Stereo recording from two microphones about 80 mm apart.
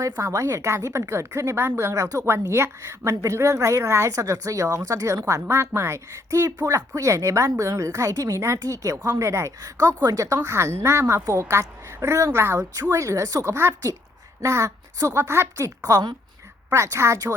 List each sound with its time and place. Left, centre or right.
0.0 s a woman's voice: right
5.5 s a woman's voice: right
9.6 s a woman's voice: right
13.5 s a woman's voice: right